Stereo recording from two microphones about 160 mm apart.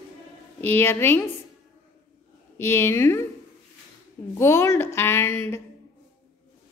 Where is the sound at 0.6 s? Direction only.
10° left (ahead or behind).